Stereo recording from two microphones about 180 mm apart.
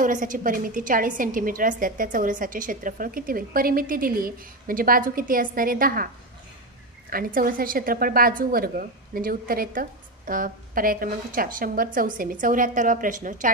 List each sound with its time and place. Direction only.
0.0 s a woman's voice: 45° right (ahead or behind)
7.1 s a woman's voice: 50° right (ahead or behind)